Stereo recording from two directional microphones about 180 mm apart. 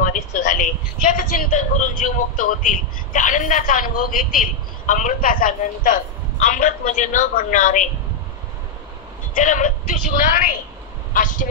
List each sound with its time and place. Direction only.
0.0 s a man's voice: 45° left (ahead or behind)
9.3 s a man's voice: 50° left (ahead or behind)